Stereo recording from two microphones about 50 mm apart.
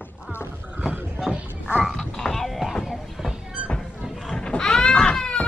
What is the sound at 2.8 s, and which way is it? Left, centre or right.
Music, centre.